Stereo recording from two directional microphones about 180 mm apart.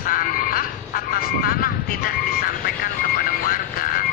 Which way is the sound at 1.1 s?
55° left (ahead or behind).